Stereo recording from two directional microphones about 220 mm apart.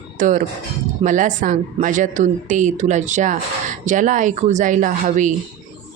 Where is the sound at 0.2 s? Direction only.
35° right (ahead or behind).